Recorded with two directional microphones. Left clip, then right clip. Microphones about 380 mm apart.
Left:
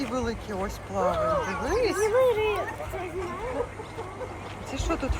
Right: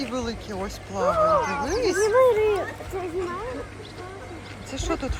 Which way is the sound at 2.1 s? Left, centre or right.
Right.